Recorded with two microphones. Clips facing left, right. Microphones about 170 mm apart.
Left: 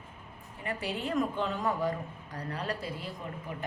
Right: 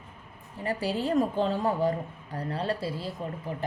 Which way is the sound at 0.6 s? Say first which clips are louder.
Right 6 dB; 35° right (ahead or behind).